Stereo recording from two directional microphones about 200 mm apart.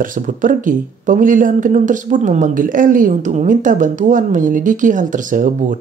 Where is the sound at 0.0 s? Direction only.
40° right (ahead or behind).